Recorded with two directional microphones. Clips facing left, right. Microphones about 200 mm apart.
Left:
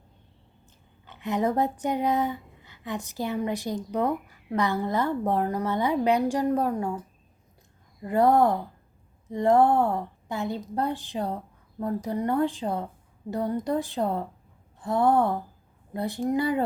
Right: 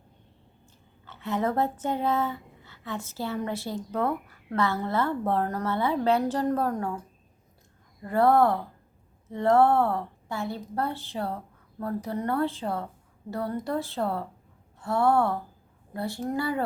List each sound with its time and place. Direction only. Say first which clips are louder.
1.0 s speech: left 2 dB; 15° left (ahead or behind)
8.0 s speech: left 1 dB; 15° left (ahead or behind)